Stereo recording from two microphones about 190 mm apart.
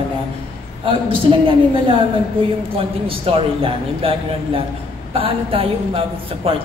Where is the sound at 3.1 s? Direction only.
30° right (ahead or behind).